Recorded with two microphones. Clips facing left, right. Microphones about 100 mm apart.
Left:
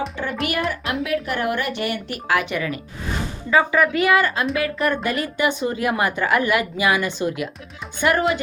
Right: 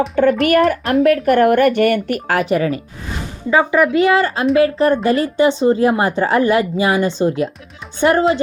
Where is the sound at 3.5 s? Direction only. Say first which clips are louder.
Right 4 dB; 20° right (ahead or behind).